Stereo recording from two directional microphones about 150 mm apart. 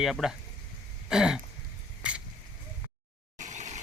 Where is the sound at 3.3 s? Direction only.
55° right (ahead or behind).